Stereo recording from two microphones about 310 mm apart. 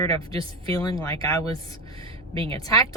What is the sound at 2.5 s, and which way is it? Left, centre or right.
Speech, centre.